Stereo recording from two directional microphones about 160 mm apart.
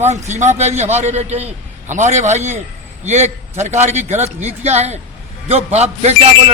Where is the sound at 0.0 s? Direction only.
45° right (ahead or behind).